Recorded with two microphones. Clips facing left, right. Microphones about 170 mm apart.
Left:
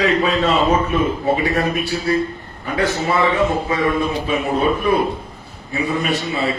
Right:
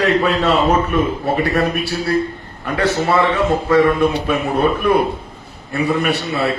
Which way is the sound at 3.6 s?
65° right (ahead or behind).